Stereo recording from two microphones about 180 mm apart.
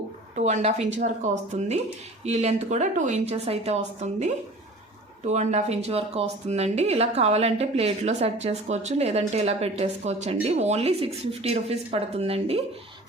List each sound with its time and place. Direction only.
0.3 s speech: 40° right (ahead or behind)